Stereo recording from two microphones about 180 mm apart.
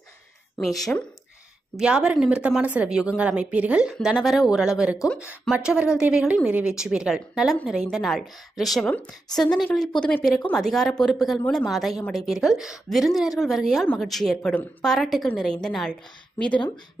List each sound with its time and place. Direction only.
1.8 s a woman's voice: 5° right (ahead or behind)